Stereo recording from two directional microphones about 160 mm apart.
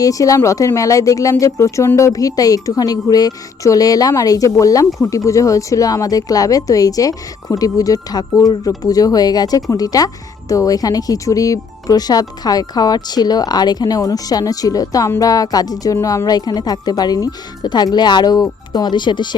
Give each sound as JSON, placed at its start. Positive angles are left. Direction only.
{"t": 0.0, "sound": "speech", "side_deg": 20}